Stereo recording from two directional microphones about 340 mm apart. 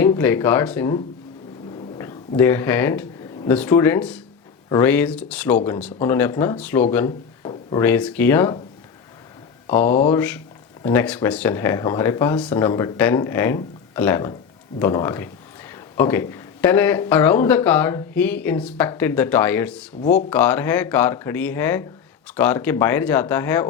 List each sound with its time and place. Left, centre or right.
0.0 s speech: centre
9.6 s speech: centre
20.0 s speech: left
20.3 s speech: centre